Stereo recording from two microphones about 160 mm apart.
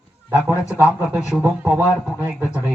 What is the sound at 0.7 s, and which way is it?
Speech, 10° right (ahead or behind).